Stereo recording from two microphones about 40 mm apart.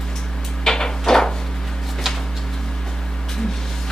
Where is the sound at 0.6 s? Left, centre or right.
Centre.